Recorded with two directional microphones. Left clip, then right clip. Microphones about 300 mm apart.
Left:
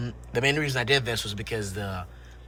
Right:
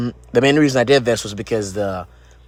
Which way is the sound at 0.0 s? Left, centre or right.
Right.